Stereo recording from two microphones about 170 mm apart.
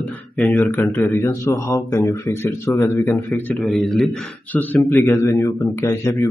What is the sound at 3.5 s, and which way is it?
A man's voice, centre (ahead or behind).